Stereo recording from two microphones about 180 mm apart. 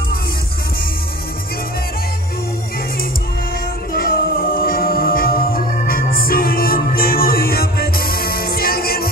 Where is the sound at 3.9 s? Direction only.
55° left (ahead or behind).